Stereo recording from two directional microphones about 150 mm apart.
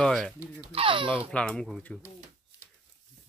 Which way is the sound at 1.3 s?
5° left (ahead or behind).